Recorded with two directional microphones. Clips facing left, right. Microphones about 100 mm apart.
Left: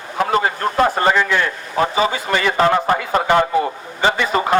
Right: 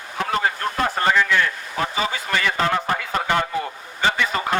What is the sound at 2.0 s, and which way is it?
Speech, 20° left (ahead or behind).